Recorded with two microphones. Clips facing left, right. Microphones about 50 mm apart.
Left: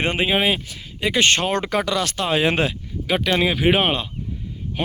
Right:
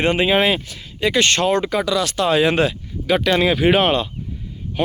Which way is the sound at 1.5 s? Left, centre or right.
Left.